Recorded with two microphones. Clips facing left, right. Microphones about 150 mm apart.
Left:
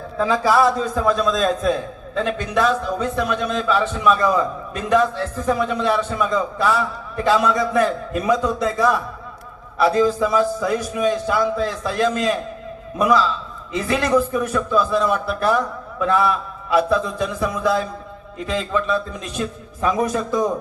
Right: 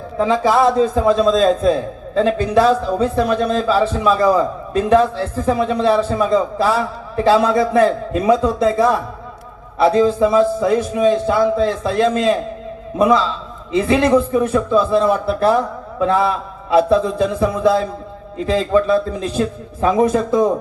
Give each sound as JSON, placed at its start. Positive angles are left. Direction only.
{"t": 0.2, "sound": "a man's voice", "side_deg": -25}